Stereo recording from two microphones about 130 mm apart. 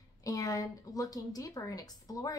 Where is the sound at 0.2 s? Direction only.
25° left (ahead or behind).